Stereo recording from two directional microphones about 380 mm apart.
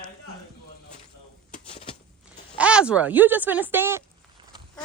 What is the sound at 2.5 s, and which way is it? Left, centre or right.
Speech, centre.